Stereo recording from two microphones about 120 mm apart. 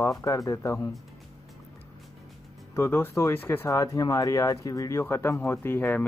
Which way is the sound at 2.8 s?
20° left (ahead or behind).